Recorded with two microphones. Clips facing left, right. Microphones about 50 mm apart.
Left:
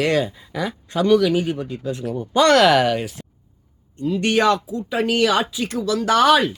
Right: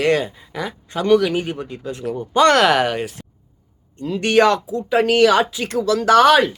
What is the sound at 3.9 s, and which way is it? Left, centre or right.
Speech, right.